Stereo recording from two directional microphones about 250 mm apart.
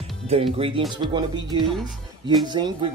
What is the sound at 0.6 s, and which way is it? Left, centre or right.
Speech, right.